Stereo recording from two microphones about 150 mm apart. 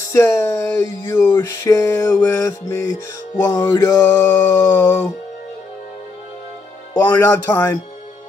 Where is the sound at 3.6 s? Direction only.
20° left (ahead or behind).